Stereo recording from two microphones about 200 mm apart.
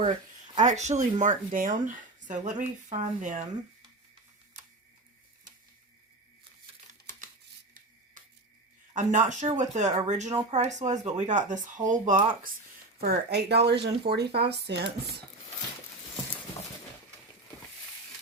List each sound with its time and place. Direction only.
0.5 s speech: 35° right (ahead or behind)
8.9 s speech: 40° right (ahead or behind)
13.0 s speech: 55° right (ahead or behind)